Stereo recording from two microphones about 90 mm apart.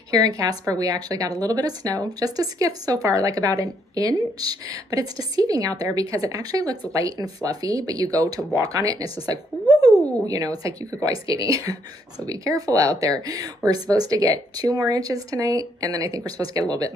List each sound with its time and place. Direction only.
0.1 s a woman's voice: 40° right (ahead or behind)